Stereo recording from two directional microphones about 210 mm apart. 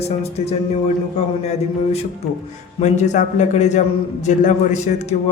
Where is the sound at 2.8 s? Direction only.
35° left (ahead or behind).